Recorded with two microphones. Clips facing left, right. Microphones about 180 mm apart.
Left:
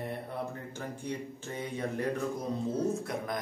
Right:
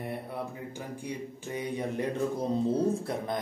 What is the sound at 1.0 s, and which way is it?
Speech, 10° right (ahead or behind).